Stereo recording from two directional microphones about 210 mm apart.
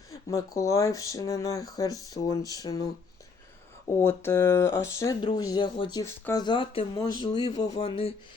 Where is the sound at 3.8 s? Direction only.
10° left (ahead or behind).